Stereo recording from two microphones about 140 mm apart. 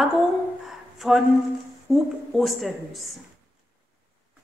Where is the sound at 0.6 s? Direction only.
Centre (ahead or behind).